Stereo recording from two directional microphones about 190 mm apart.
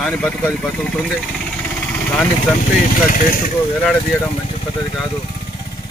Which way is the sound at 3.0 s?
45° left (ahead or behind).